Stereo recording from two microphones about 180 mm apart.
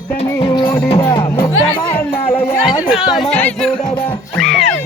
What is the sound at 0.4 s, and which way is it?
Music, 20° left (ahead or behind).